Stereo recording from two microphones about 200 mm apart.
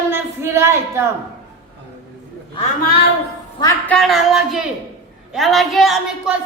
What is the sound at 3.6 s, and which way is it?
Speech, 15° left (ahead or behind).